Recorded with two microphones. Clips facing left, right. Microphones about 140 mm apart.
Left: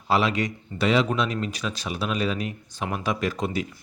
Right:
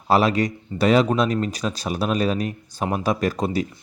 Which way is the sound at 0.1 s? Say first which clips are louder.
Right 5 dB; 40° right (ahead or behind).